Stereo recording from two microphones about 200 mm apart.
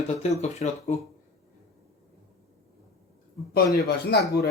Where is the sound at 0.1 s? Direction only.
35° left (ahead or behind).